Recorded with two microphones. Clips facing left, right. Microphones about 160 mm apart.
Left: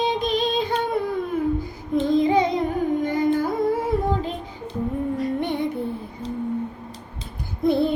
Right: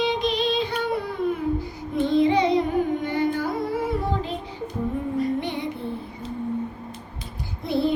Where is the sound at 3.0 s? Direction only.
45° left (ahead or behind).